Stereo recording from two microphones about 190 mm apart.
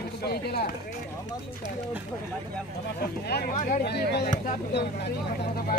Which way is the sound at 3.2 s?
55° left (ahead or behind).